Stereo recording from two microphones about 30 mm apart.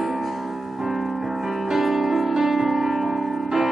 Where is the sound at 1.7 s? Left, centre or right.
Centre.